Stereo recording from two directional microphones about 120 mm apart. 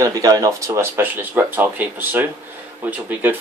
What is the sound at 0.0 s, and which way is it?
A man's voice, 30° right (ahead or behind).